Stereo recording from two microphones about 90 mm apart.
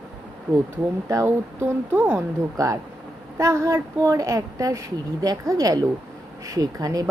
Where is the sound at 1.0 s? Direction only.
35° right (ahead or behind).